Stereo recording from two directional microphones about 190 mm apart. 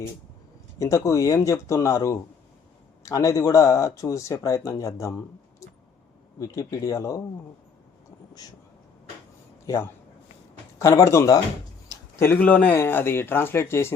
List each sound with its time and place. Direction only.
0.8 s speech: 15° left (ahead or behind)
9.6 s speech: 15° left (ahead or behind)